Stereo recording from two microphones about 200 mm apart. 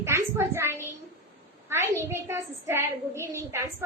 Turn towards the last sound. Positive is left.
turn(degrees=-15)  # may be behind; listen again after turning